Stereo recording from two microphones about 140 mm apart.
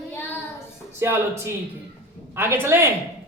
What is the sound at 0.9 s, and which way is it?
A woman's voice, 20° right (ahead or behind).